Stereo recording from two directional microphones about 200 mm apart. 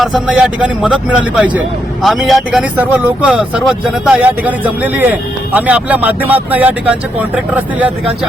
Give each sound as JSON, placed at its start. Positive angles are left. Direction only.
{"t": 0.0, "sound": "speech", "side_deg": -5}